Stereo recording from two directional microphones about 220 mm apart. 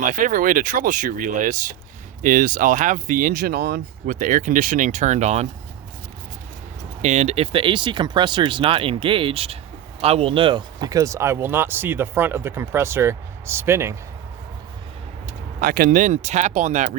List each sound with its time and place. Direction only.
0.0 s speech: 35° right (ahead or behind)
7.0 s speech: 30° right (ahead or behind); by 13.9 s 10° right (ahead or behind)
15.6 s speech: 40° right (ahead or behind)